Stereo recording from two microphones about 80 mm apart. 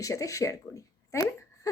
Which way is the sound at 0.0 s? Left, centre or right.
Left.